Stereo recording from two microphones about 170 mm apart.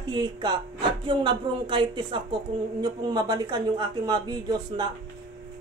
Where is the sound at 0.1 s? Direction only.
25° right (ahead or behind).